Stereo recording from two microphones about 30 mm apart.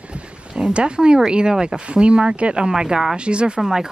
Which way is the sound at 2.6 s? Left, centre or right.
Right.